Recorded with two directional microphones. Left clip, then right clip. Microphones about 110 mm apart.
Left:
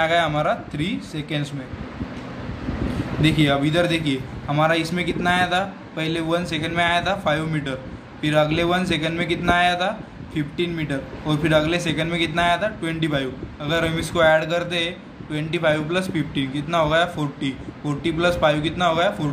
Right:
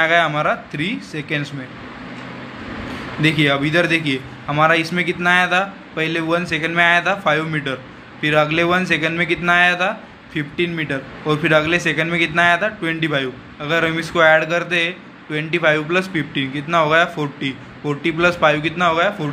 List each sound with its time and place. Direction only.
0.0 s a man's voice: 15° right (ahead or behind)
3.2 s a man's voice: 15° right (ahead or behind)